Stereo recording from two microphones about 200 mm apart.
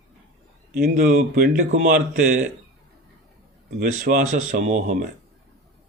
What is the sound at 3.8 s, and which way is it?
Speech, 45° right (ahead or behind).